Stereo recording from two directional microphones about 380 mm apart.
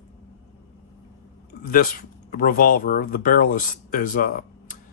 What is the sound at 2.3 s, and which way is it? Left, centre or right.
Speech, left.